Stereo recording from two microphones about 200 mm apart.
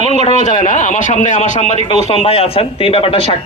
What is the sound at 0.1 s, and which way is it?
A man's voice, 30° left (ahead or behind).